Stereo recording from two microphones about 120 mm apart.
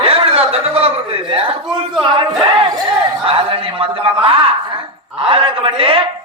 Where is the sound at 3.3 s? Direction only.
50° right (ahead or behind).